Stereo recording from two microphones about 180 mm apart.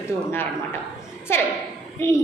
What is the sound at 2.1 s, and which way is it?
Speech, 15° left (ahead or behind).